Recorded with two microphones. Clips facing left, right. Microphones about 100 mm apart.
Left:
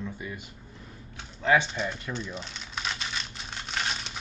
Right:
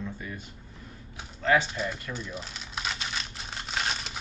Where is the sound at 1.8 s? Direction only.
5° right (ahead or behind).